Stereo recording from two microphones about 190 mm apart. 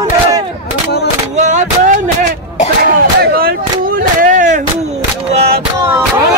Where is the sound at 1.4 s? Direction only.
40° right (ahead or behind).